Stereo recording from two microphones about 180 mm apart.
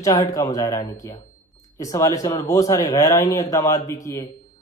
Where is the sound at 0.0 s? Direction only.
20° left (ahead or behind).